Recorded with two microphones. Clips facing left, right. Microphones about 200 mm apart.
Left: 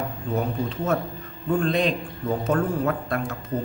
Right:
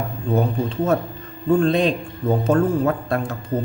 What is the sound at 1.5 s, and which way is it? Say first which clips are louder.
Speech: right 4 dB; 30° right (ahead or behind).